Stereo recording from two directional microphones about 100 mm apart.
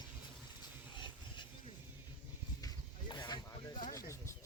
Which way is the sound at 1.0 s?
50° left (ahead or behind).